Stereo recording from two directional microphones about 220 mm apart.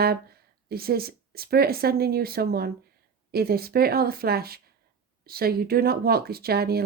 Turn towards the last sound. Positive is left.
turn(degrees=-45)  # may be behind; listen again after turning